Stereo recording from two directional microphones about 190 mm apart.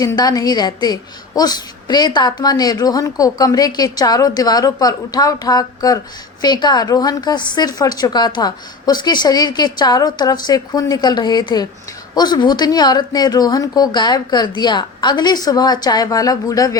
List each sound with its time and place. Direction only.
0.0 s a woman's voice: 20° left (ahead or behind)